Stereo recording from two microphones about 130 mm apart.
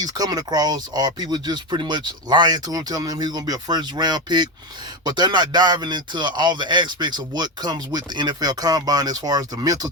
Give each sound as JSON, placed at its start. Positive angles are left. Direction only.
{"t": 0.0, "sound": "speech", "side_deg": -30}